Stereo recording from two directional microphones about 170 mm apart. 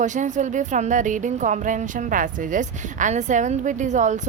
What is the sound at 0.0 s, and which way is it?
Speech, 45° right (ahead or behind).